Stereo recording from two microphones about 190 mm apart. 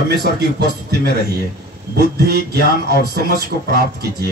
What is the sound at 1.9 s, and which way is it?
Speech, 55° right (ahead or behind).